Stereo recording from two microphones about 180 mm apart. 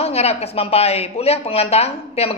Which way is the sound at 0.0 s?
35° left (ahead or behind).